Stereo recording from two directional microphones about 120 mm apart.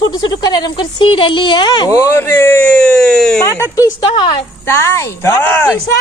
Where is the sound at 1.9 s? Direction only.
20° left (ahead or behind); by 3.4 s 5° left (ahead or behind).